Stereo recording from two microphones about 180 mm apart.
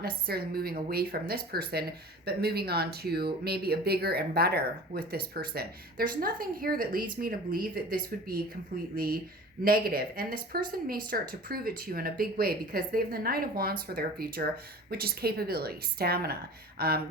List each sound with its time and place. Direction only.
0.0 s speech: 60° right (ahead or behind)